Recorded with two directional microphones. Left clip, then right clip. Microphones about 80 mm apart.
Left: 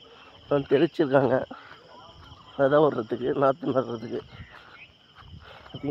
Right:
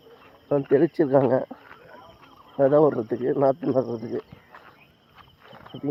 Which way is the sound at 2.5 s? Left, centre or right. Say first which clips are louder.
Right 2 dB; centre.